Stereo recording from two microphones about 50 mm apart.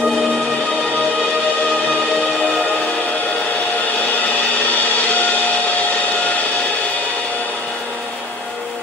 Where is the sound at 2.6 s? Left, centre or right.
Left.